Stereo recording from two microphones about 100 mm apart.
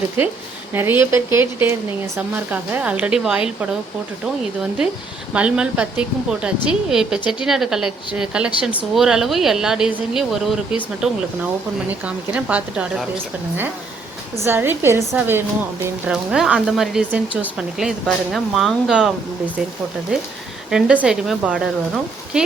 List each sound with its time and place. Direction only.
0.7 s a woman's voice: 20° right (ahead or behind)
5.3 s a woman's voice: 10° right (ahead or behind)
14.4 s speech: 20° right (ahead or behind)
16.0 s a woman's voice: 10° right (ahead or behind)
17.7 s a woman's voice: centre (ahead or behind)
20.7 s a woman's voice: 5° right (ahead or behind)